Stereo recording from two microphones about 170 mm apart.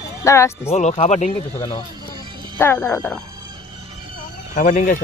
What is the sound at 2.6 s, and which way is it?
Speech, 10° left (ahead or behind).